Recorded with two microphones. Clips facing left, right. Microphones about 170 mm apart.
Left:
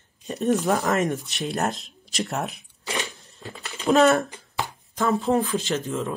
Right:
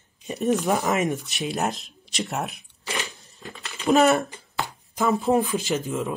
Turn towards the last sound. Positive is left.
turn(degrees=-5)  # may be behind; listen again after turning